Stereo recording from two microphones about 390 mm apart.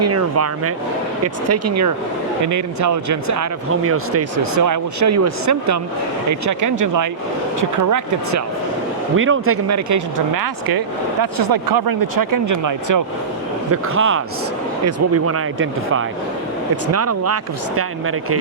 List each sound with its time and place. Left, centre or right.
0.0 s speech: right
9.1 s speech: right
13.9 s speech: right